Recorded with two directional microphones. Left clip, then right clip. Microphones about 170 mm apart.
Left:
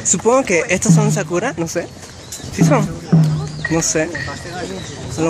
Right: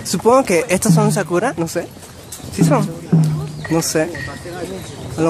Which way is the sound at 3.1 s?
15° left (ahead or behind).